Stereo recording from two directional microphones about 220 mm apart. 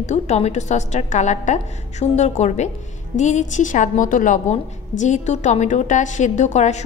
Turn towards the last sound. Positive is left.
turn(degrees=30)  # may be behind; listen again after turning